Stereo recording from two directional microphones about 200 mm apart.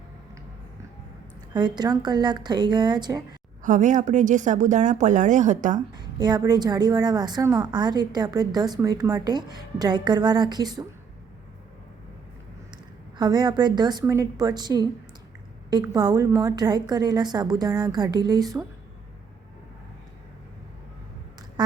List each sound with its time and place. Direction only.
1.5 s a woman's voice: 20° right (ahead or behind)
3.6 s a woman's voice: 40° right (ahead or behind)
5.7 s a woman's voice: 20° right (ahead or behind)
12.7 s a woman's voice: 20° right (ahead or behind)